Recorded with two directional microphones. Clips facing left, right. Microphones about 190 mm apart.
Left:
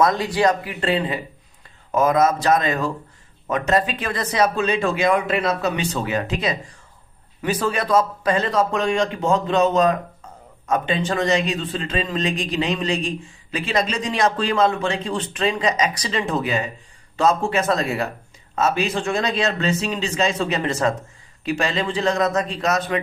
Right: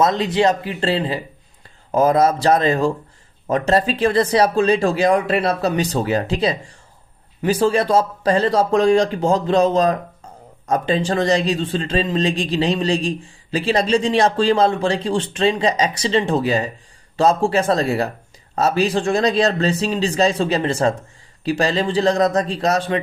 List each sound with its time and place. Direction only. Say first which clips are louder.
0.0 s a man's voice: right 2 dB; 25° right (ahead or behind)